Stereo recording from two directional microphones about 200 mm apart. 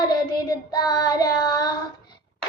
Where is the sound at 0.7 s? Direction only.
20° left (ahead or behind).